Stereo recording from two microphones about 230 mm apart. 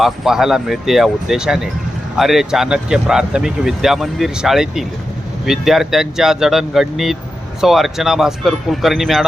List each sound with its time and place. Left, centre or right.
0.0 s speech: centre